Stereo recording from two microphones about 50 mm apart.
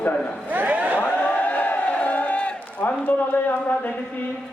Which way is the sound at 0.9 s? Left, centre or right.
Left.